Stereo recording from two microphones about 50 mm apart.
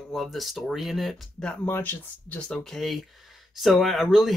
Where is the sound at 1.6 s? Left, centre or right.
Left.